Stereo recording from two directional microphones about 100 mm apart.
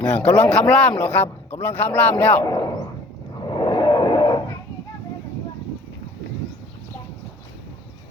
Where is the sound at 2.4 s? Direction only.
40° left (ahead or behind).